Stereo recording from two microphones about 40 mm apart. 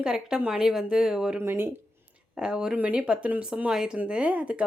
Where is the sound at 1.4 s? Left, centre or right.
Right.